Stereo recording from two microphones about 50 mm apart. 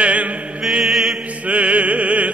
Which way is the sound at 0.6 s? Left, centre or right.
Centre.